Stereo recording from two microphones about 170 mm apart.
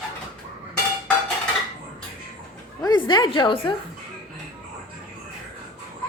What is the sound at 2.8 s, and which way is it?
Speech, 25° left (ahead or behind).